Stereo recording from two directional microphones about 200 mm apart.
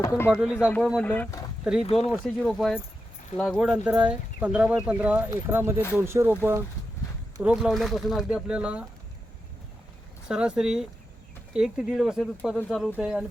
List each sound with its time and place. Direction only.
0.0 s speech: 15° left (ahead or behind)
0.3 s speech: 5° right (ahead or behind)
1.0 s speech: 10° left (ahead or behind)
1.8 s speech: 30° left (ahead or behind)
2.2 s speech: centre (ahead or behind)
7.3 s speech: 5° right (ahead or behind)
10.2 s speech: 5° right (ahead or behind)